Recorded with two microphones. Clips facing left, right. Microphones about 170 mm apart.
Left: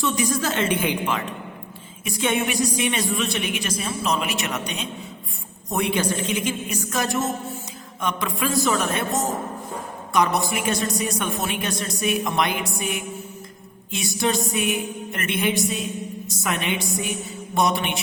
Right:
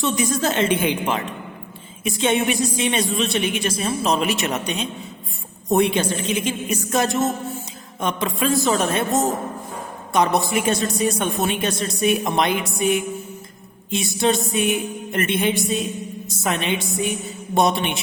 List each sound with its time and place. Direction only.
0.0 s a woman's voice: 25° right (ahead or behind)